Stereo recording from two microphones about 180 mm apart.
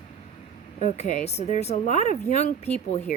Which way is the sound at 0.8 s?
40° left (ahead or behind).